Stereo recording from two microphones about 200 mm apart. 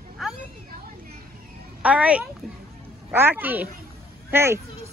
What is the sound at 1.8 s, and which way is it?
A woman's voice, 5° right (ahead or behind).